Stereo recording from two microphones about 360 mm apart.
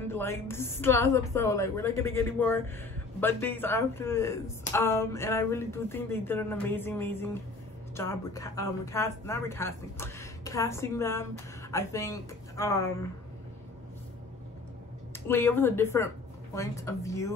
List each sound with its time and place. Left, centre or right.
0.1 s a woman's voice: centre
15.1 s a woman's voice: centre